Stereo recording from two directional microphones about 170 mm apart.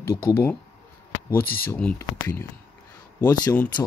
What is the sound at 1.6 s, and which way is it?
Speech, 10° left (ahead or behind).